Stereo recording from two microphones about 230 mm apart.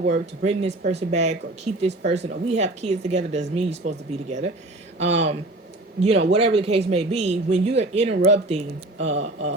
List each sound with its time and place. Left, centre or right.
0.1 s speech: right